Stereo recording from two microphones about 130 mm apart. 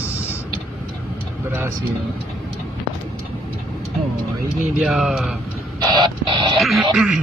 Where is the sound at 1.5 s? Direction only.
15° right (ahead or behind).